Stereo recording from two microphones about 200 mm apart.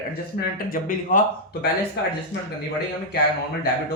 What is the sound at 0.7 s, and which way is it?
Speech, 45° left (ahead or behind).